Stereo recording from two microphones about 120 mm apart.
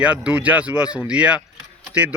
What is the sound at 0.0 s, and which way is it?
Speech, 10° right (ahead or behind).